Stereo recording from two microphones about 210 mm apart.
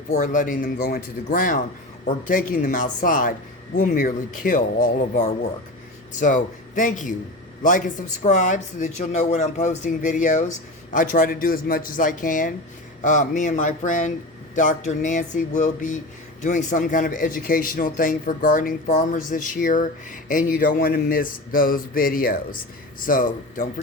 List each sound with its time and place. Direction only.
0.1 s a man's voice: 35° left (ahead or behind)